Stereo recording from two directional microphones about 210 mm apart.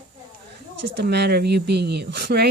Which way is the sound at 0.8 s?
55° right (ahead or behind).